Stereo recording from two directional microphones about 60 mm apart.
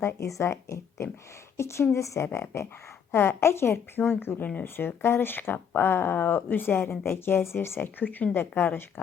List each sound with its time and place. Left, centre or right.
0.2 s speech: left
7.8 s speech: left